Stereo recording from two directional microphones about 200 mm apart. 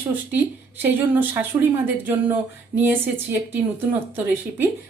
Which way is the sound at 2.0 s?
10° right (ahead or behind).